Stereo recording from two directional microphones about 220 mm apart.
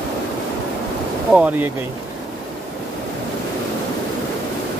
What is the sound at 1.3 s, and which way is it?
Speech, 5° right (ahead or behind).